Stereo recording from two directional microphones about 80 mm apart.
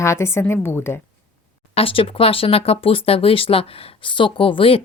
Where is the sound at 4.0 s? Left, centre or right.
Left.